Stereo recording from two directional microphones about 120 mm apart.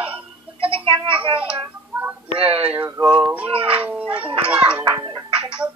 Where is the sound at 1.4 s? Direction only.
10° right (ahead or behind).